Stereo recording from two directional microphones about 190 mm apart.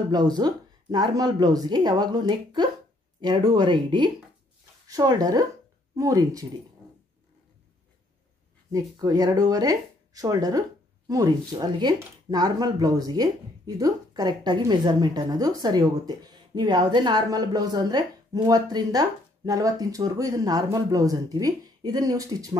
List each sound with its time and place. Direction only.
0.1 s speech: 20° right (ahead or behind)
8.7 s speech: 20° right (ahead or behind)